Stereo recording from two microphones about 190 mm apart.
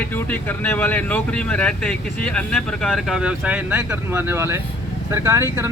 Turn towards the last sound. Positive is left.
turn(degrees=-15)  # may be behind; listen again after turning